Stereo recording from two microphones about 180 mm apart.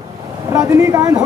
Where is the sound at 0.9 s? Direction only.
20° right (ahead or behind).